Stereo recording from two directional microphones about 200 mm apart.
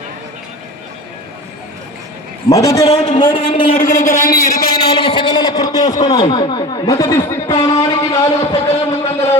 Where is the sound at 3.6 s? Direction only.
45° left (ahead or behind).